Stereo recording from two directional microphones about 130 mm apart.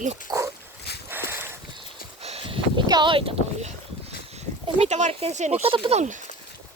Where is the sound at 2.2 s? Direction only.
45° right (ahead or behind).